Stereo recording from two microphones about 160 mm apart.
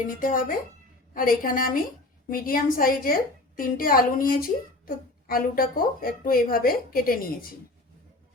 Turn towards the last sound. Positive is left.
turn(degrees=65)  # may be behind; listen again after turning